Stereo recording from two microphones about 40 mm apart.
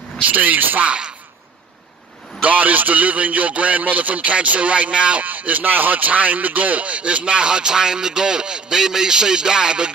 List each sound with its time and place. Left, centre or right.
0.2 s a man's voice: right
0.8 s speech: right
2.4 s a man's voice: right
5.2 s speech: right